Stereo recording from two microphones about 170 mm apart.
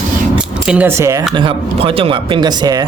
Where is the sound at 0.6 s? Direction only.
10° right (ahead or behind).